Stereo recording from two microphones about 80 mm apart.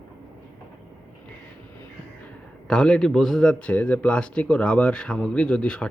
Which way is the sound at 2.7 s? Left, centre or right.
Centre.